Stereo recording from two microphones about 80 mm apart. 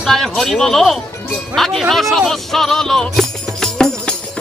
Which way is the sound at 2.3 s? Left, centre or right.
Centre.